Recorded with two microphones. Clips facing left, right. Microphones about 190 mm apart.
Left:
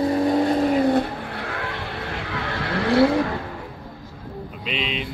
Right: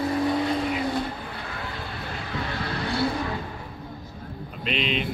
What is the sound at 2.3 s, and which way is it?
Vehicle, 90° left.